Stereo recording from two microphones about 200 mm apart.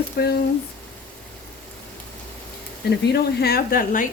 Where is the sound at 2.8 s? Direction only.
55° left (ahead or behind).